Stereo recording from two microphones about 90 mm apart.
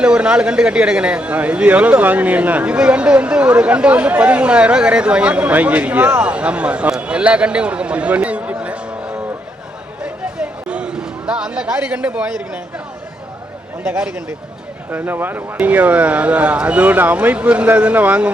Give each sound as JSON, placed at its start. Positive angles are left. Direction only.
{"t": 0.0, "sound": "speech", "side_deg": -10}
{"t": 10.0, "sound": "a sound", "side_deg": -10}
{"t": 13.9, "sound": "speech", "side_deg": -10}
{"t": 14.8, "sound": "speech", "side_deg": -20}